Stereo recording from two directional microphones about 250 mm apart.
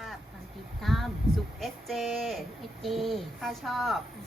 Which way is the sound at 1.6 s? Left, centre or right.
Centre.